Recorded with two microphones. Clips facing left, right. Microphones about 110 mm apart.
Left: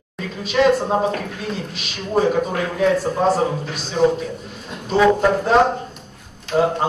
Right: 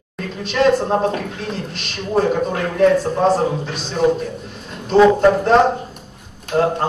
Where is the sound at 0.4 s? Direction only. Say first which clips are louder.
Right 1 dB; centre (ahead or behind).